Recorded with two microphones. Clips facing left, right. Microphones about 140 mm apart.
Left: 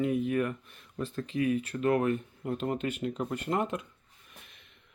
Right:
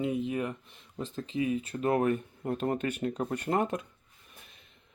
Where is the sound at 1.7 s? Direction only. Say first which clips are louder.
Right 1 dB; 35° right (ahead or behind).